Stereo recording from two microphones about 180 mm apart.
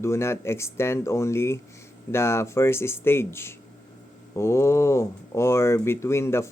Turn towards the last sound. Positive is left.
turn(degrees=15)  # may be behind; listen again after turning